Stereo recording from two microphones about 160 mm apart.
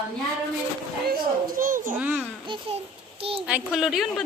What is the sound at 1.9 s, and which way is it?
Speech, 10° right (ahead or behind).